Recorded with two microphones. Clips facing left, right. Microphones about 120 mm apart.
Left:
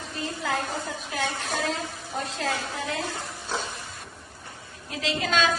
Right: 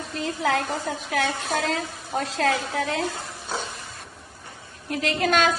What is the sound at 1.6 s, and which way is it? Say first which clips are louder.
Speech: right 3 dB; 90° right.